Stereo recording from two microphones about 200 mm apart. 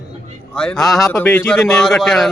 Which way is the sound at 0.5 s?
5° left (ahead or behind).